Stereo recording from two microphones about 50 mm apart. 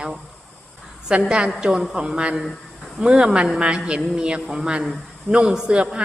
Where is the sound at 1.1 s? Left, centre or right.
Centre.